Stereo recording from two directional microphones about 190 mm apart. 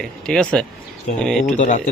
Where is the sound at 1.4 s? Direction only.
40° left (ahead or behind).